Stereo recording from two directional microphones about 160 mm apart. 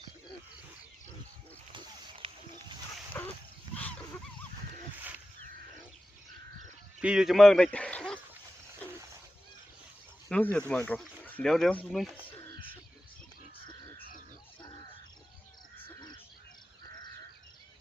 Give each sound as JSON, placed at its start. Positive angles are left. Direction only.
{"t": 1.7, "sound": "a sound", "side_deg": -30}
{"t": 3.1, "sound": "dog", "side_deg": 15}
{"t": 3.7, "sound": "dog", "side_deg": -25}
{"t": 7.0, "sound": "a man's voice", "side_deg": -5}
{"t": 10.2, "sound": "speech", "side_deg": 5}